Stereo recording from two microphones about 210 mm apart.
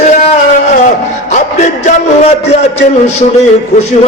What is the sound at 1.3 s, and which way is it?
Mantra, 35° left (ahead or behind).